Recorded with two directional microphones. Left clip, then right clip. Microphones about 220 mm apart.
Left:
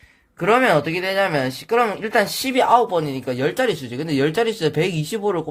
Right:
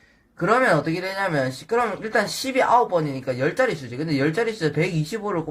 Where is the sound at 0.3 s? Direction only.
45° left (ahead or behind).